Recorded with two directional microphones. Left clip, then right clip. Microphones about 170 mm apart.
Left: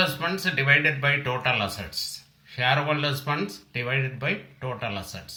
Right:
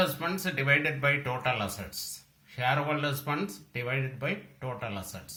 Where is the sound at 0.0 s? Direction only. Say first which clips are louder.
Left 5 dB; 20° right (ahead or behind).